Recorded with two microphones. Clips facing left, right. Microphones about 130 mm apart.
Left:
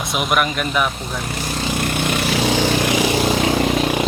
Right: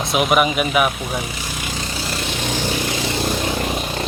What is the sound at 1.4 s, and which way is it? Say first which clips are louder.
Vehicle: left 6 dB; 50° left (ahead or behind).